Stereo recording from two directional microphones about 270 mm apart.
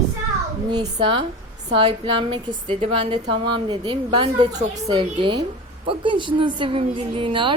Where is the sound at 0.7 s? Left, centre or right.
Centre.